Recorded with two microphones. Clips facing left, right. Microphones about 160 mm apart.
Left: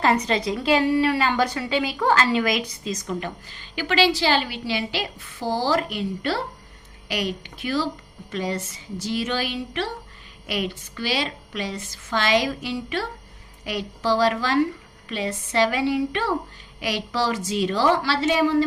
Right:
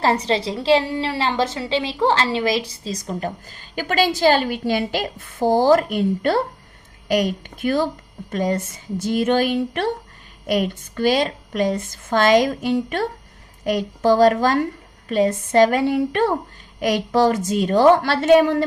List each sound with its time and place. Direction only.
0.0 s a woman's voice: 30° right (ahead or behind); by 18.6 s 55° right (ahead or behind)